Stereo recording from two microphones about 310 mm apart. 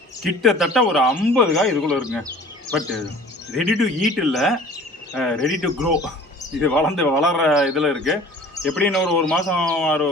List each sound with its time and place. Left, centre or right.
0.2 s a man's voice: centre
3.6 s a man's voice: centre